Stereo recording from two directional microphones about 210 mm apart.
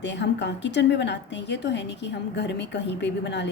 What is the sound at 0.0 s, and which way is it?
A woman's voice, 55° left (ahead or behind).